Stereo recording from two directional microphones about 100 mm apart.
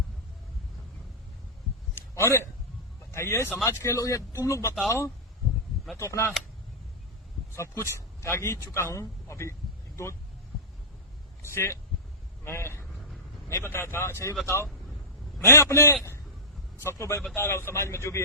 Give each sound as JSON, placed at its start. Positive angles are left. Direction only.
{"t": 2.0, "sound": "a sound", "side_deg": 25}
{"t": 3.1, "sound": "speech", "side_deg": 25}
{"t": 7.5, "sound": "speech", "side_deg": 30}
{"t": 11.4, "sound": "speech", "side_deg": 25}
{"t": 12.9, "sound": "vehicle", "side_deg": 0}
{"t": 13.5, "sound": "a man's voice", "side_deg": 25}